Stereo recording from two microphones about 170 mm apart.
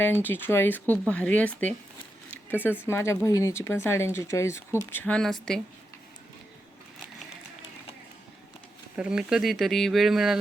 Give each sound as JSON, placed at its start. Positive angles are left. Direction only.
{"t": 0.0, "sound": "speech", "side_deg": 10}
{"t": 2.8, "sound": "speech", "side_deg": 15}
{"t": 9.0, "sound": "speech", "side_deg": -5}